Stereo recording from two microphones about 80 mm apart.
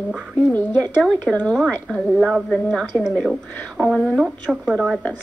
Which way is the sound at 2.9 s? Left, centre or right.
Right.